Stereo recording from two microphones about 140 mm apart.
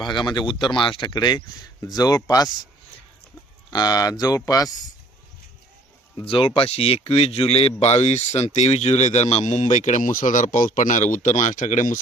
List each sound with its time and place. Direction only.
0.0 s speech: 35° left (ahead or behind)
3.7 s speech: 30° left (ahead or behind)
6.1 s a man's voice: 40° left (ahead or behind); by 11.9 s 60° left (ahead or behind)